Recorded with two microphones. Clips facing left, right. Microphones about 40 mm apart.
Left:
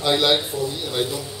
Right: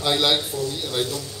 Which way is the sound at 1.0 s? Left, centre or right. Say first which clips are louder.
Left 4 dB; centre.